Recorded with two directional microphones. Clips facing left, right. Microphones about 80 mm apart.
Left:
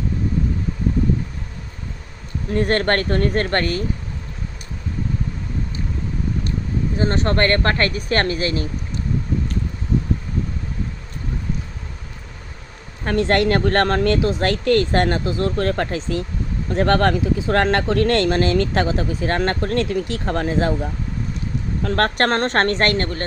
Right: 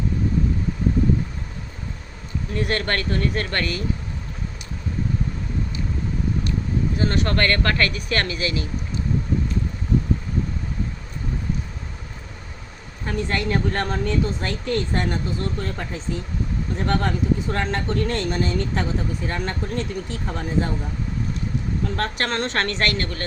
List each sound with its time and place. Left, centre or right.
2.5 s speech: left
7.0 s speech: left
13.1 s speech: left
21.8 s speech: left